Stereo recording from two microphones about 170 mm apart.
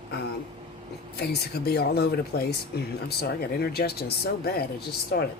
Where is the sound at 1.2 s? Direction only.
65° left (ahead or behind).